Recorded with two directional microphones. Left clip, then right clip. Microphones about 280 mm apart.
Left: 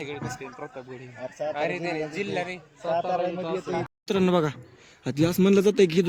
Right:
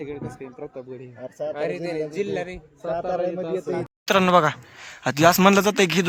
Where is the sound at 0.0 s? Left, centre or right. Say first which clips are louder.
Right 1 dB; right.